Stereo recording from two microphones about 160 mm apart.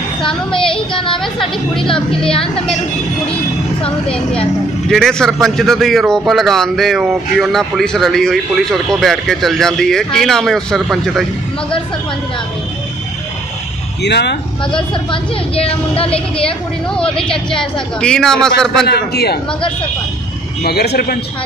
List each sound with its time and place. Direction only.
0.7 s a sound: 30° left (ahead or behind)
2.0 s a man's voice: 5° left (ahead or behind)
4.8 s a man's voice: 5° left (ahead or behind)
14.0 s a man's voice: 90° left
15.0 s a woman's voice: 35° left (ahead or behind)
16.9 s a man's voice: 5° left (ahead or behind)
18.9 s a man's voice: 90° left
20.6 s speech: 85° left